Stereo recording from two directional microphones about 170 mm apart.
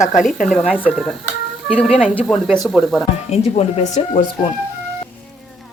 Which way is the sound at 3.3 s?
40° left (ahead or behind).